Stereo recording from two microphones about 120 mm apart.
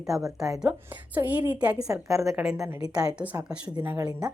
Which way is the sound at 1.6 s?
10° right (ahead or behind).